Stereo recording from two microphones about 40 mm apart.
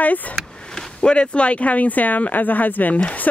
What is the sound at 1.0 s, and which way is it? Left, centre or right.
Speech, left.